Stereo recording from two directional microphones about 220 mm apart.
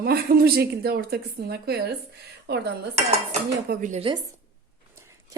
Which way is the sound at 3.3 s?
35° right (ahead or behind).